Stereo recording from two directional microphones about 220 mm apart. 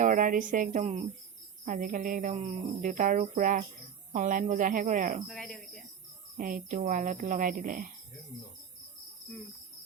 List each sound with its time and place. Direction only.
0.0 s speech: 35° right (ahead or behind)
5.3 s speech: centre (ahead or behind)
6.3 s speech: 40° right (ahead or behind)